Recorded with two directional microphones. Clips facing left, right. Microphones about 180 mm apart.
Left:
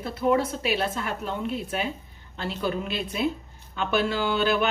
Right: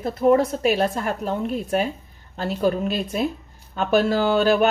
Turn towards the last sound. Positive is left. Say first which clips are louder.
# right 6 dB
turn(degrees=-40)  # may be behind; listen again after turning